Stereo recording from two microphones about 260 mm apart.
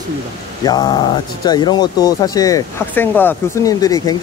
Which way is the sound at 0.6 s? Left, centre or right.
Centre.